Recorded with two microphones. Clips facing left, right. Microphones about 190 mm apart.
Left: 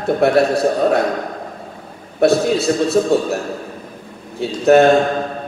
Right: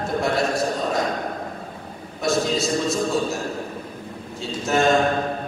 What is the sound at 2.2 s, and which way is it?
A man's voice, 60° left (ahead or behind).